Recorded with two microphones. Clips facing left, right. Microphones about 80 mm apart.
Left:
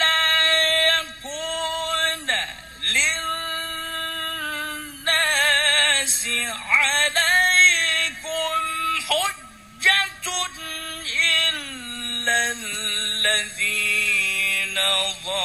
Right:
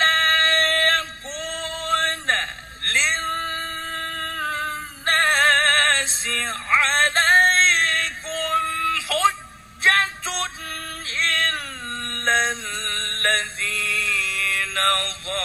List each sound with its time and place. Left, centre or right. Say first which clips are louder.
0.0 s male singing: right 2 dB; right
9.8 s music: right 3 dB; right
11.1 s a sound: right 1 dB; right